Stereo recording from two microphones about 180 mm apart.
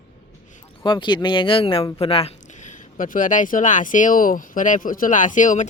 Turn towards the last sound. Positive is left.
turn(degrees=45)  # may be behind; listen again after turning